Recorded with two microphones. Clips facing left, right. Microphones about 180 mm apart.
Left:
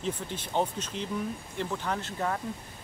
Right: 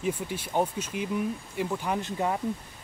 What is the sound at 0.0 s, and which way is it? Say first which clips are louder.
Speech: right 3 dB; 10° right (ahead or behind).